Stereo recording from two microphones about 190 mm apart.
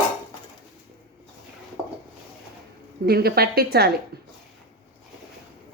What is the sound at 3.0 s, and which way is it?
Speech, 55° right (ahead or behind).